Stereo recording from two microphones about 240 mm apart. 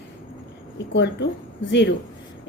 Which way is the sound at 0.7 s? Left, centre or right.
Left.